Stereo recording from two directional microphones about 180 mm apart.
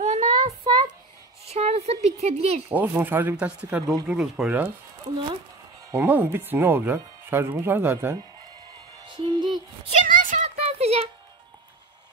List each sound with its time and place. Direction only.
0.0 s child singing: 35° right (ahead or behind)
1.5 s speech: 35° right (ahead or behind)
2.7 s speech: 10° right (ahead or behind)
5.9 s speech: 10° right (ahead or behind)
9.0 s speech: 25° right (ahead or behind)
10.0 s a sound: 45° right (ahead or behind)